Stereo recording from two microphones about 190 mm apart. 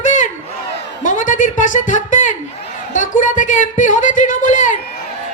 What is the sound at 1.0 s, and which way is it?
Speech, 40° left (ahead or behind).